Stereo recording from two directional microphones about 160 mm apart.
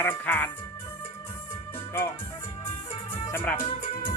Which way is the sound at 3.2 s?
15° left (ahead or behind).